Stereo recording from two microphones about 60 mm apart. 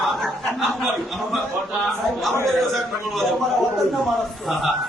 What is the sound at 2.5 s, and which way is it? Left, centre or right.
Speech, centre.